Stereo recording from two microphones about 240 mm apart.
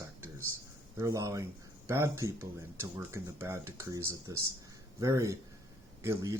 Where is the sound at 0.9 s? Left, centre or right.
Centre.